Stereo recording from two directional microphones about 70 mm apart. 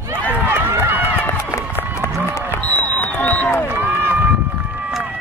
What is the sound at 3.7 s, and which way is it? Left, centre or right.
Run, right.